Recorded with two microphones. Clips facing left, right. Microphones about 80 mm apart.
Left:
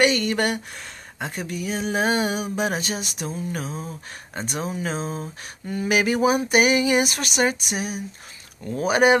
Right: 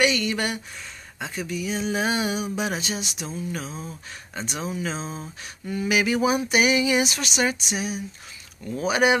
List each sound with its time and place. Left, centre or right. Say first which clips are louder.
0.0 s speech: left 3 dB; left